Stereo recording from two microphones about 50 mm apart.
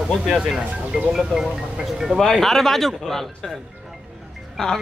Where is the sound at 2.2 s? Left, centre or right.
Centre.